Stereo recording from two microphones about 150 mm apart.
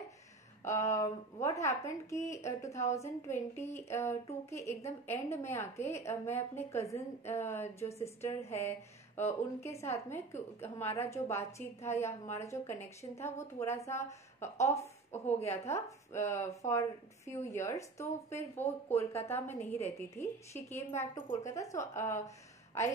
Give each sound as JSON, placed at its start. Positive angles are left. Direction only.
{"t": 0.7, "sound": "a woman's voice", "side_deg": 20}
{"t": 15.1, "sound": "speech", "side_deg": 45}
{"t": 15.5, "sound": "a woman's voice", "side_deg": 20}
{"t": 18.6, "sound": "speech", "side_deg": 45}
{"t": 19.8, "sound": "a woman's voice", "side_deg": 20}